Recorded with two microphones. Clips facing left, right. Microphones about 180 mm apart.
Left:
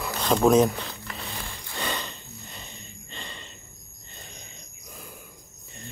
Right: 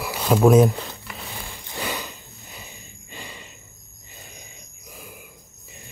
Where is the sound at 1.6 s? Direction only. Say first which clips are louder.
Right 2 dB; 10° right (ahead or behind).